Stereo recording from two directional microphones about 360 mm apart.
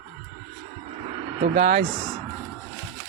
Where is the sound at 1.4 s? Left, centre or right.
Right.